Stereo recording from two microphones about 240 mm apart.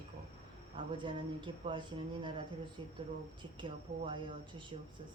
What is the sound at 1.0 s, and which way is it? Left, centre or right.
Speech, centre.